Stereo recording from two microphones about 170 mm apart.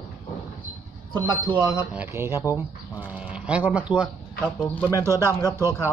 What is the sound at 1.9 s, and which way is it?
Speech, 15° right (ahead or behind).